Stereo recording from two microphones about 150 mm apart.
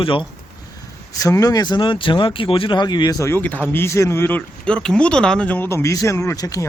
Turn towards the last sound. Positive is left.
turn(degrees=20)  # may be behind; listen again after turning